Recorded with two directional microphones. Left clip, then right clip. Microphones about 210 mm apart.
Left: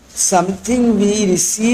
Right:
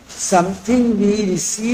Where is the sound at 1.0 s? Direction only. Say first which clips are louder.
Left 3 dB; 30° left (ahead or behind).